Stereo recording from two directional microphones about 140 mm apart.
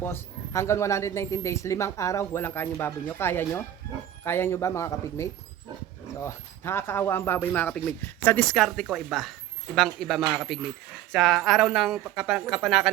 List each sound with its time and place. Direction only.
0.0 s speech: 15° left (ahead or behind)
8.5 s speech: 5° left (ahead or behind)